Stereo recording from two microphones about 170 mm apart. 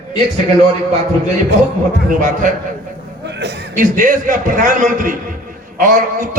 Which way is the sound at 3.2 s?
85° right.